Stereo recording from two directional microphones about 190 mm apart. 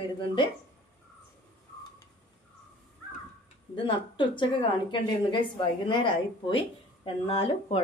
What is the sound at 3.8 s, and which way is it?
A woman's voice, 25° left (ahead or behind).